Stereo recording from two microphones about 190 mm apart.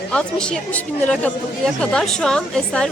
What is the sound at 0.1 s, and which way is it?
A woman's voice, 5° left (ahead or behind).